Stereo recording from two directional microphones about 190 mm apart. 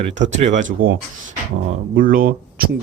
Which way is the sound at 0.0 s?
40° right (ahead or behind).